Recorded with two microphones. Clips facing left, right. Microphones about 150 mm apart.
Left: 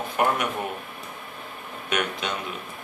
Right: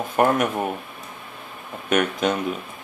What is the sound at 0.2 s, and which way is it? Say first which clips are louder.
Speech: right 5 dB; 45° right (ahead or behind).